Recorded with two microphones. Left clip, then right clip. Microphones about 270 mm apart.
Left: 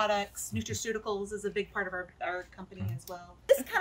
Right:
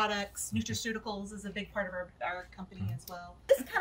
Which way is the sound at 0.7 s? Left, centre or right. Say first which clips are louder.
Left 7 dB; centre.